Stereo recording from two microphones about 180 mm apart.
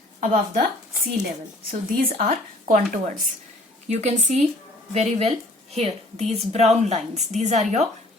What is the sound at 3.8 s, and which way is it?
A woman's voice, 40° right (ahead or behind).